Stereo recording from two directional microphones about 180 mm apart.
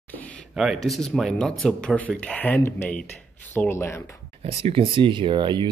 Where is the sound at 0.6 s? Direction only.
Centre (ahead or behind).